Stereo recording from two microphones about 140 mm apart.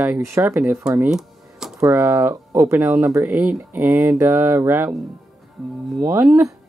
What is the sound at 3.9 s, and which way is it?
Speech, 20° right (ahead or behind).